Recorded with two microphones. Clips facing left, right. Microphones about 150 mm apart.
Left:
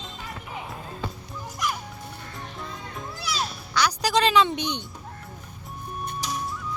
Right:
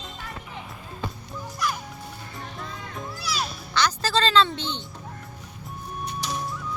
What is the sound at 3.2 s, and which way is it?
Music, 25° left (ahead or behind).